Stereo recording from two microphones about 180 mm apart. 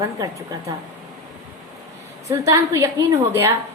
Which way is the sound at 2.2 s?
15° right (ahead or behind).